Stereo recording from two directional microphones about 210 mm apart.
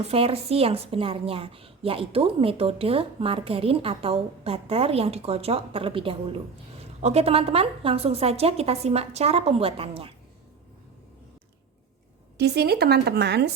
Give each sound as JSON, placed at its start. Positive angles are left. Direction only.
{"t": 0.1, "sound": "a woman's voice", "side_deg": -30}
{"t": 12.4, "sound": "speech", "side_deg": -50}